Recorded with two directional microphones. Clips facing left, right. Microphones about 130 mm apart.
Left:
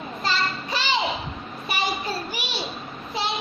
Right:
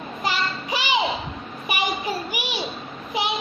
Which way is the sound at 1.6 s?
15° right (ahead or behind).